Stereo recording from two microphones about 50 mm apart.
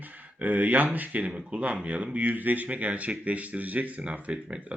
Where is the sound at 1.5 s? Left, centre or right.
Right.